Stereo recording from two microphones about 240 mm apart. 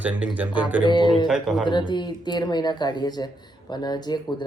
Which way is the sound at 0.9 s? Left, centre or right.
Centre.